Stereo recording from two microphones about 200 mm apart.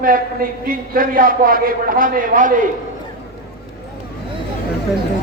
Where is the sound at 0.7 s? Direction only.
45° right (ahead or behind).